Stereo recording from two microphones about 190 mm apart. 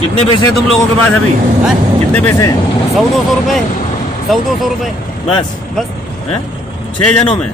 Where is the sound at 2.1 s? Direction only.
10° left (ahead or behind).